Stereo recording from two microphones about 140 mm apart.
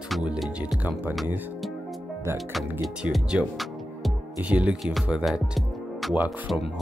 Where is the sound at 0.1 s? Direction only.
5° right (ahead or behind).